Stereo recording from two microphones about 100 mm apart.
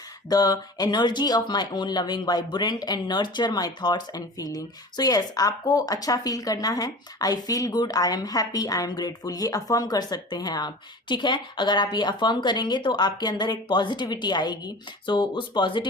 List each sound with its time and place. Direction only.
0.3 s speech: 40° left (ahead or behind)